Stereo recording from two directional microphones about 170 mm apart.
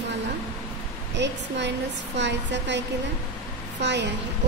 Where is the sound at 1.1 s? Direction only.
90° right.